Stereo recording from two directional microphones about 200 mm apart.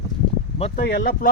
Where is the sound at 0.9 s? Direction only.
45° left (ahead or behind).